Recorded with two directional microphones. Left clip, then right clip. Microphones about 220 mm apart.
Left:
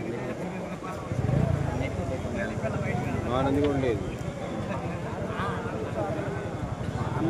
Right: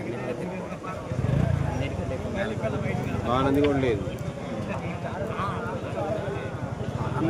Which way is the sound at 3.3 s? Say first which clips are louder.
Right 3 dB; 40° right (ahead or behind).